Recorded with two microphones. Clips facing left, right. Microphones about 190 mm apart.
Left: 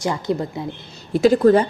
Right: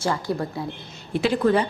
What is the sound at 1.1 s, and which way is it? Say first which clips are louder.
Speech: left 7 dB; 40° left (ahead or behind).